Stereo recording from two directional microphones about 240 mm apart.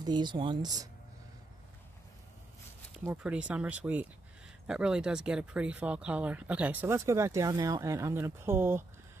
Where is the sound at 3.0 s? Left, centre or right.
Centre.